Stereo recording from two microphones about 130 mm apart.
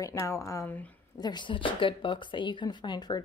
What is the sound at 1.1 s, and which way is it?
Speech, 35° left (ahead or behind).